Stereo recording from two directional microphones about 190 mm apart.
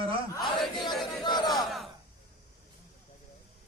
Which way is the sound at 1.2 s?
20° left (ahead or behind).